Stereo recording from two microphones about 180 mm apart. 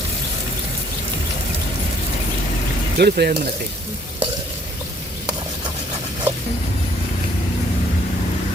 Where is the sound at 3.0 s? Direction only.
65° right (ahead or behind).